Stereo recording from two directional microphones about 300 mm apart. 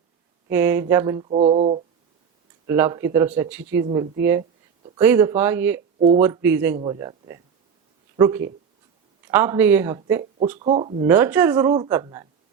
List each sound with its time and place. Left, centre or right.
0.5 s mantra: centre
2.6 s mantra: centre
3.8 s speech: centre
4.2 s mantra: centre
6.0 s speech: centre
6.2 s mantra: centre
8.1 s speech: centre
9.2 s mantra: centre
10.6 s speech: centre
11.1 s mantra: centre